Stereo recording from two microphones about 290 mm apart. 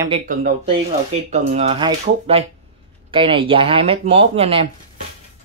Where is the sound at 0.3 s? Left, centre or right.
Right.